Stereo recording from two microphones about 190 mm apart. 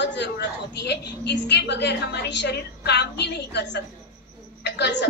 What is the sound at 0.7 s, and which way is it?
A woman's voice, 60° left (ahead or behind).